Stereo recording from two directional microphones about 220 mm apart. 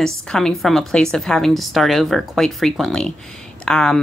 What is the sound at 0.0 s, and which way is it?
A woman's voice, 5° left (ahead or behind).